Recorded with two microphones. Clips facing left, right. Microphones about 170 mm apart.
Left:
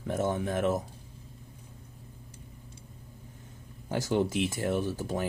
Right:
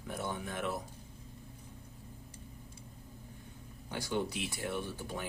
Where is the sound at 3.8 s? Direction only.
45° left (ahead or behind).